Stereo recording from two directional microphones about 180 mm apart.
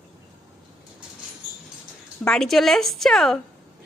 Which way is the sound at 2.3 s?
Centre (ahead or behind).